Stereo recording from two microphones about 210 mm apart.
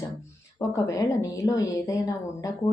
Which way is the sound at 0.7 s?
15° left (ahead or behind).